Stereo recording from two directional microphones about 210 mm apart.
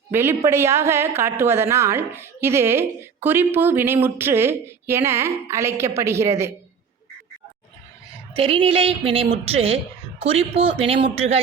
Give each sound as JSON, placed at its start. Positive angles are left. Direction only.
{"t": 0.1, "sound": "a woman's voice", "side_deg": -10}
{"t": 8.4, "sound": "speech", "side_deg": -25}